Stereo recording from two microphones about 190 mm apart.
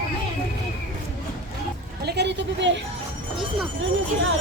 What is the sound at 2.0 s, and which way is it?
Speech, 60° right (ahead or behind).